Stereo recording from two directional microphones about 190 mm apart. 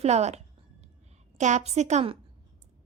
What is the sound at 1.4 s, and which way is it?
Speech, 40° right (ahead or behind).